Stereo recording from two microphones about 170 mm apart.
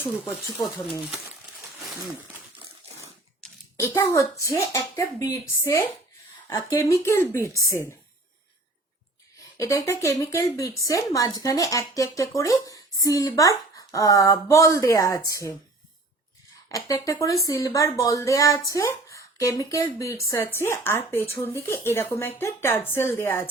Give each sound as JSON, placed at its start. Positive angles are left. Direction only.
{"t": 3.8, "sound": "speech", "side_deg": 15}
{"t": 9.6, "sound": "speech", "side_deg": 20}
{"t": 16.6, "sound": "speech", "side_deg": 20}